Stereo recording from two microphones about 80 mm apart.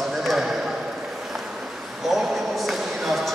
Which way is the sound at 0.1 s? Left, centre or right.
Centre.